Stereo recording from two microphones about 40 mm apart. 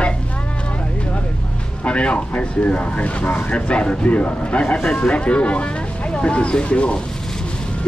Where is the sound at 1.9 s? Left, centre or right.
Left.